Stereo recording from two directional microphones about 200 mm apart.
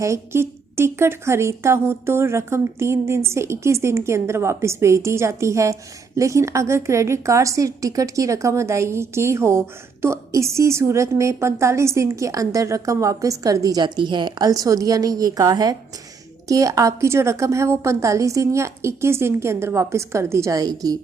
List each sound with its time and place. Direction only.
0.0 s a woman's voice: 15° right (ahead or behind)